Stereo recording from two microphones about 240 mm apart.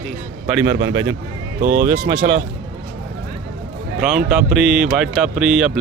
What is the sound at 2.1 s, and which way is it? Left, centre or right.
Speech, right.